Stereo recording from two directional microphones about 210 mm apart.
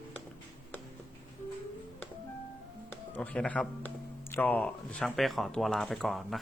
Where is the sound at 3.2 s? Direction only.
5° left (ahead or behind).